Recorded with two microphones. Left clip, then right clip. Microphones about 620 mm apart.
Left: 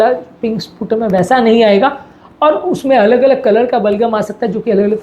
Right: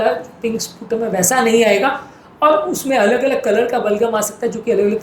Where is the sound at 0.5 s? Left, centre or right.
Left.